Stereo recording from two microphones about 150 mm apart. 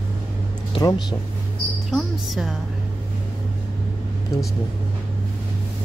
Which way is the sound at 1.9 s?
Centre (ahead or behind).